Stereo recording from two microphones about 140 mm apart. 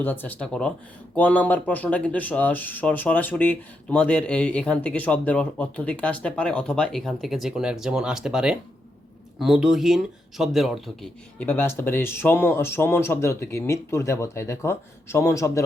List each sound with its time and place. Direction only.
0.0 s speech: 15° left (ahead or behind)
11.4 s speech: 15° left (ahead or behind)